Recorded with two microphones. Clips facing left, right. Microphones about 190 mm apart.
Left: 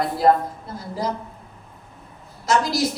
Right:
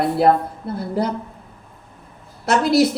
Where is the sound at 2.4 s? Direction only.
60° right (ahead or behind).